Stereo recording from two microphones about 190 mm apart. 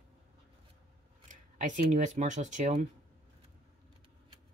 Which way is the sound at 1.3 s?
40° right (ahead or behind).